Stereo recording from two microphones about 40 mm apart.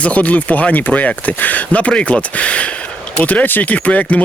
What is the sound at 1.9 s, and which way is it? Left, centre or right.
Speech, left.